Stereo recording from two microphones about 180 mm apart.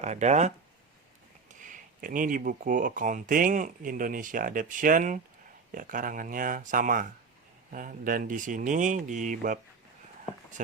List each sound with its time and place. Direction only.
0.0 s speech: 40° right (ahead or behind)
1.5 s speech: 45° right (ahead or behind)